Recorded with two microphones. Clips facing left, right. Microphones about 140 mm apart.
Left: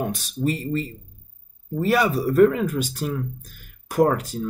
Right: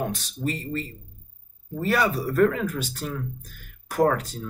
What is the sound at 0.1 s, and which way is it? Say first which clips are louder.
Speech: left 5 dB; 15° left (ahead or behind).